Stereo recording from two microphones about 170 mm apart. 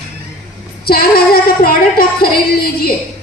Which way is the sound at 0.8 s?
60° left (ahead or behind).